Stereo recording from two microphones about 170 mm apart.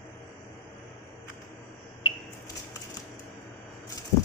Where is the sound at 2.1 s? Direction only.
30° left (ahead or behind).